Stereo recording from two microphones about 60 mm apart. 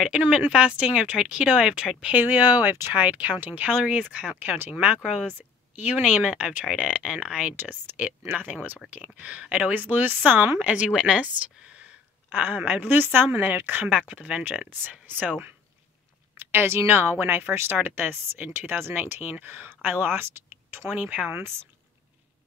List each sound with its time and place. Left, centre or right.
0.5 s speech: centre
2.1 s a woman's voice: right
4.7 s a woman's voice: centre
7.5 s a woman's voice: right
10.6 s a woman's voice: right
16.3 s speech: right
20.9 s a woman's voice: right
21.3 s speech: right